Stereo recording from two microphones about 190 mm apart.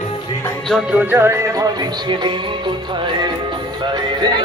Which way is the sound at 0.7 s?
5° right (ahead or behind).